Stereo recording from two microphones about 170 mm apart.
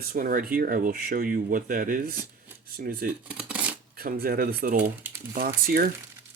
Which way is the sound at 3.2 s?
5° right (ahead or behind).